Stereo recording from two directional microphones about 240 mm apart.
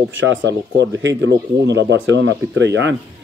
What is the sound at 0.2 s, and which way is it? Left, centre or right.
Speech, right.